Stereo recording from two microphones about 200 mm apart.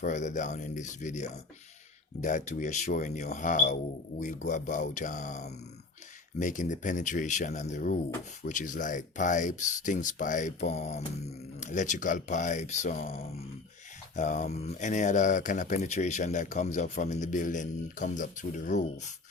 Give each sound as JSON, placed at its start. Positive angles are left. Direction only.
{"t": 0.0, "sound": "speech", "side_deg": 35}